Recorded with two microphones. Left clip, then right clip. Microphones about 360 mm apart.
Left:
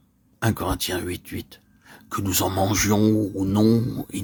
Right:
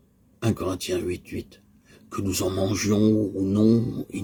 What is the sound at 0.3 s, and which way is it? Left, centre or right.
Speech, left.